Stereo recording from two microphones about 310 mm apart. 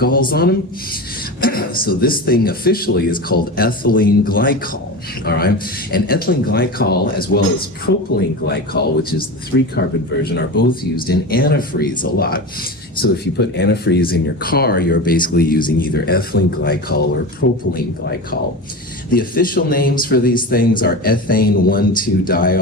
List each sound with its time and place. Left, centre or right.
0.0 s a man's voice: left
11.0 s a man's voice: left
19.1 s speech: left